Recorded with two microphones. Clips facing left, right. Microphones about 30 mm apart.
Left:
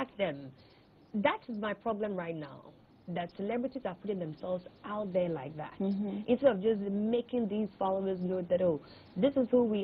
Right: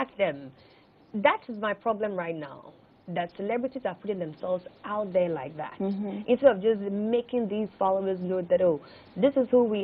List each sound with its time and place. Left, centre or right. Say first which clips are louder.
0.0 s speech: right 6 dB; right